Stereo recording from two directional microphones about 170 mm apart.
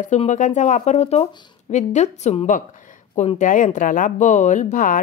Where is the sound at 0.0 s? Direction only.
45° left (ahead or behind).